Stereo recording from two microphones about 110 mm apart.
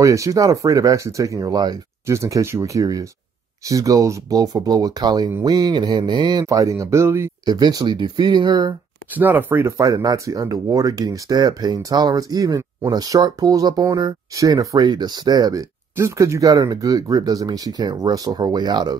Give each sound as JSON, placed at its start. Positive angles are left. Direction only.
{"t": 0.0, "sound": "speech", "side_deg": -30}
{"t": 6.4, "sound": "speech", "side_deg": -30}
{"t": 7.4, "sound": "speech", "side_deg": -40}
{"t": 9.1, "sound": "speech", "side_deg": -15}